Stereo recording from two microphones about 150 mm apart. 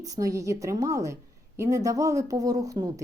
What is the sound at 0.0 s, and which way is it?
Speech, 25° right (ahead or behind).